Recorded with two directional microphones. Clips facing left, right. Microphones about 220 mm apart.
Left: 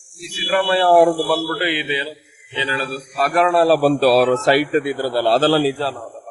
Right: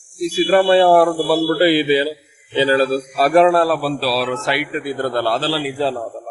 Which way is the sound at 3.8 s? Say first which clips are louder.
Left 6 dB; 45° left (ahead or behind).